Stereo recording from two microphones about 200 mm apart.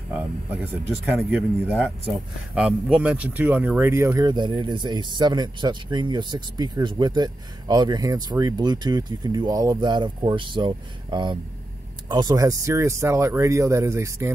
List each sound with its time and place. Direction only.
0.1 s speech: centre (ahead or behind)
2.5 s speech: 5° right (ahead or behind)